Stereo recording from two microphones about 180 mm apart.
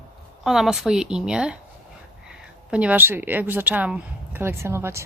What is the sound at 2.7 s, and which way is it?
Speech, 5° right (ahead or behind).